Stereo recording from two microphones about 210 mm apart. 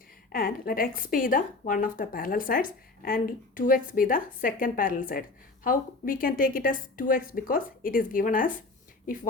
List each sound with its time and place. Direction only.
0.3 s a woman's voice: 45° left (ahead or behind)